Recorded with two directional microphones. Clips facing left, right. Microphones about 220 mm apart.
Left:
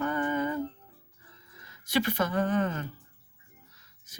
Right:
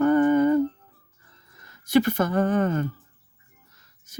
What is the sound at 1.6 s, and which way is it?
Speech, 50° right (ahead or behind).